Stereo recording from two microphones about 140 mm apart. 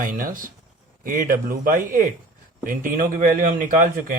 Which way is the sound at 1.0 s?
75° right (ahead or behind).